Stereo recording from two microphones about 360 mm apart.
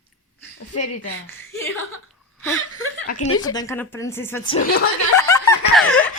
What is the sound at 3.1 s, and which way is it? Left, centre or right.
Speech, left.